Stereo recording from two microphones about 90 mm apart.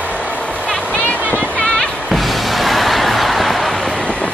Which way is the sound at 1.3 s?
15° left (ahead or behind).